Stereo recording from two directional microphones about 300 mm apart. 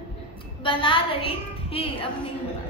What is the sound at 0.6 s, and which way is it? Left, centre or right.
A woman's voice, centre.